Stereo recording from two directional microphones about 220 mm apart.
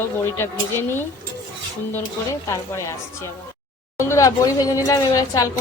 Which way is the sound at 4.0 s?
15° left (ahead or behind).